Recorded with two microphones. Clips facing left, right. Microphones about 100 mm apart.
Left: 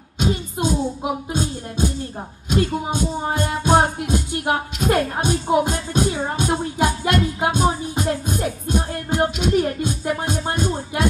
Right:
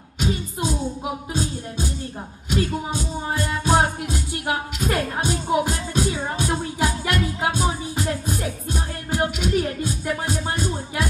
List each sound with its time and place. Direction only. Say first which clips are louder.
0.2 s music: left 3 dB; 30° left (ahead or behind)